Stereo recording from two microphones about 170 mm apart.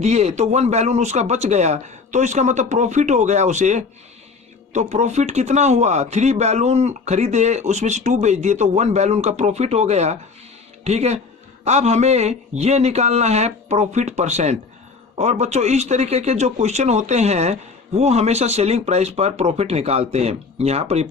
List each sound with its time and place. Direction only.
0.0 s speech: 40° right (ahead or behind)